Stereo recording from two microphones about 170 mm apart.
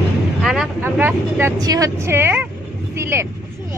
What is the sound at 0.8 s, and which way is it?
Speech, 10° right (ahead or behind).